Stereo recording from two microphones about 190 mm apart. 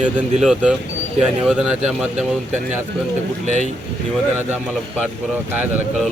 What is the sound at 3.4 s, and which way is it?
Speech, 40° right (ahead or behind).